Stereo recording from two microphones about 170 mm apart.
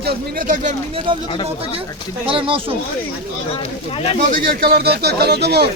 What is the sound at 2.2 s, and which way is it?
Speech, 30° right (ahead or behind).